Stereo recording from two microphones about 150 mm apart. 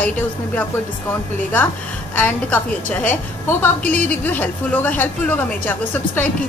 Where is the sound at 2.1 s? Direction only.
10° left (ahead or behind).